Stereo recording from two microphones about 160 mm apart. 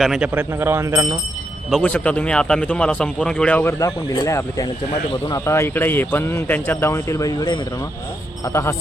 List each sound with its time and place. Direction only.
0.0 s speech: centre (ahead or behind)
0.3 s speech: 15° right (ahead or behind)
1.7 s a man's voice: 10° left (ahead or behind); by 7.6 s 25° left (ahead or behind)